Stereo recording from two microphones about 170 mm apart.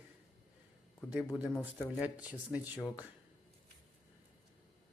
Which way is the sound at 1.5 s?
15° left (ahead or behind).